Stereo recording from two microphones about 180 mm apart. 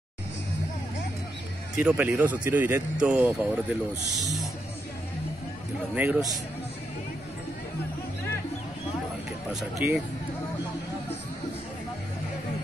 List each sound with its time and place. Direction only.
1.8 s speech: 10° right (ahead or behind)
5.9 s speech: 10° right (ahead or behind)
9.8 s speech: 10° right (ahead or behind)